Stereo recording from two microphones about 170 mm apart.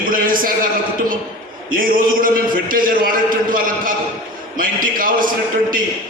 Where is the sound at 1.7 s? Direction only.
55° right (ahead or behind).